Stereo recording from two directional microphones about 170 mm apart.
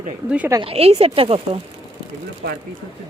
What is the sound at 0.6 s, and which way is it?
Speech, 35° right (ahead or behind).